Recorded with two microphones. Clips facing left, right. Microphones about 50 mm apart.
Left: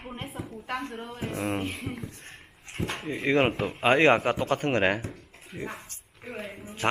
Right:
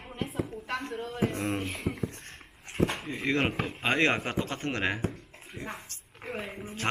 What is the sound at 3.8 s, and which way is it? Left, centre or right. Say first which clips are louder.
Speech: left 6 dB; left.